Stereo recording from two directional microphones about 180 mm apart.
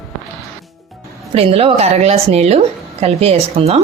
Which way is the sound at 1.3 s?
35° right (ahead or behind).